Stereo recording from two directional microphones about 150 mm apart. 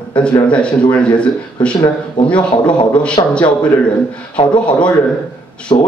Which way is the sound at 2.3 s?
30° left (ahead or behind).